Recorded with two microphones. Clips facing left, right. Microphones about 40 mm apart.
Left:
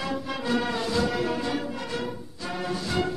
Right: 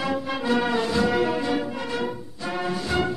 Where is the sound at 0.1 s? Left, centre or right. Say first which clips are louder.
Right 3 dB; right.